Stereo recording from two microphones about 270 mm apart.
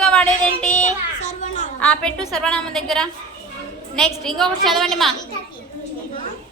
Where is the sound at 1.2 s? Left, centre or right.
Left.